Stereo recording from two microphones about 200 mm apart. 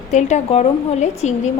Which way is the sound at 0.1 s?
35° left (ahead or behind).